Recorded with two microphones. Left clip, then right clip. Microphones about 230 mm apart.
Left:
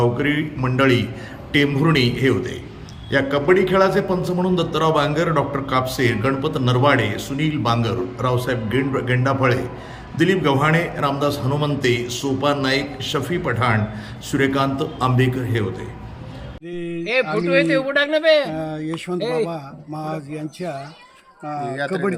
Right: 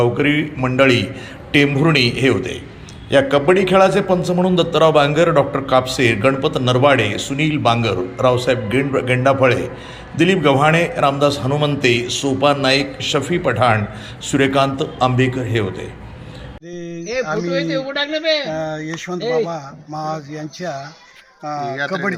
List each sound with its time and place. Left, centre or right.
0.0 s a man's voice: centre
17.5 s speech: left
18.5 s a man's voice: centre
19.2 s speech: left
19.5 s a man's voice: centre
21.8 s speech: centre